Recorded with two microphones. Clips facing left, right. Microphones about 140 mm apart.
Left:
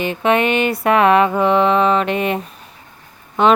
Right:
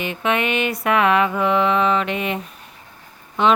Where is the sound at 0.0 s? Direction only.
35° left (ahead or behind).